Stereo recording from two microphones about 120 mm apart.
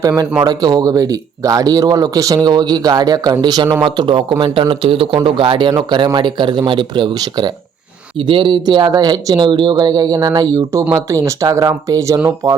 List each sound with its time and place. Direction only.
0.4 s speech: 35° right (ahead or behind)